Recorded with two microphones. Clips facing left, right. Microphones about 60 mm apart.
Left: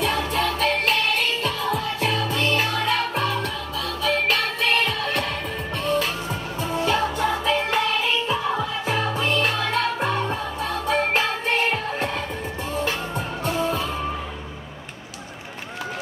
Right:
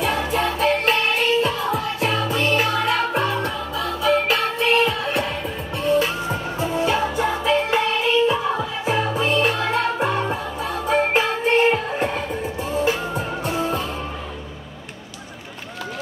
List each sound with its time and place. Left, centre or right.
0.0 s music: centre
6.2 s music: right